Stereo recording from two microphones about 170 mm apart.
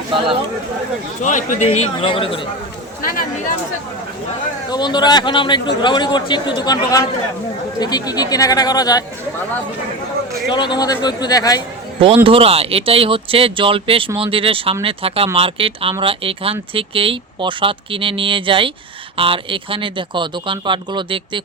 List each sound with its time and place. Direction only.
0.1 s speech: 30° right (ahead or behind)
1.2 s speech: 45° left (ahead or behind)
3.0 s speech: 55° left (ahead or behind)
4.7 s speech: 25° left (ahead or behind)
10.5 s speech: 25° left (ahead or behind)
11.9 s speech: 35° right (ahead or behind)